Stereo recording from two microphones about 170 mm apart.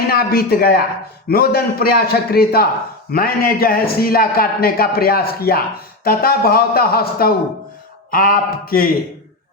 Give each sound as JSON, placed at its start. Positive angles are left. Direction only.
{"t": 0.1, "sound": "a man's voice", "side_deg": 60}